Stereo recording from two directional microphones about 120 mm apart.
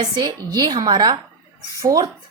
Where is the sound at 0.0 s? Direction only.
40° right (ahead or behind).